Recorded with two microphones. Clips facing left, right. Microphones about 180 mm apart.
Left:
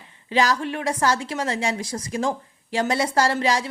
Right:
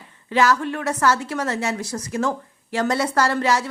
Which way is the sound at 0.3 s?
15° left (ahead or behind).